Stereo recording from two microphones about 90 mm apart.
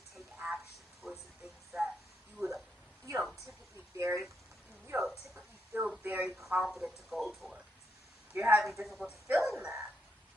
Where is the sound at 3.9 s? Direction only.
30° right (ahead or behind).